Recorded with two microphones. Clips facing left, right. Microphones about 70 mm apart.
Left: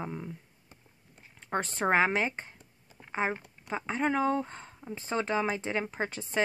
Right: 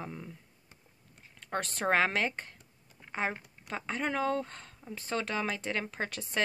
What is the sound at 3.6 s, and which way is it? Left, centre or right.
Speech, centre.